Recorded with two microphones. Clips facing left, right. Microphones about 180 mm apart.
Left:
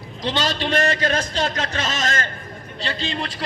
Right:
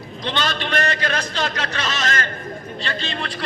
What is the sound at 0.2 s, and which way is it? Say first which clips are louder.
A man's voice: left 2 dB; 35° left (ahead or behind).